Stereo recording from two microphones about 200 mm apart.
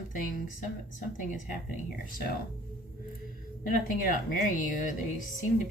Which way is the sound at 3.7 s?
40° left (ahead or behind).